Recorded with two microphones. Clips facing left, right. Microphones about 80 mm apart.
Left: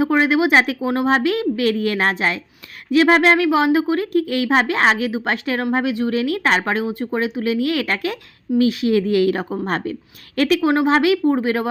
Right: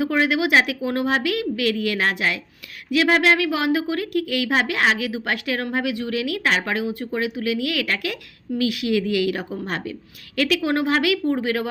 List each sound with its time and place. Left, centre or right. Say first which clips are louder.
0.0 s a woman's voice: left 4 dB; left
10.7 s a woman's voice: left 5 dB; left